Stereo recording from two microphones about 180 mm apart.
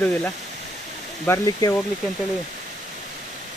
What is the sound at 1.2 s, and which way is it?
Speech, 15° left (ahead or behind).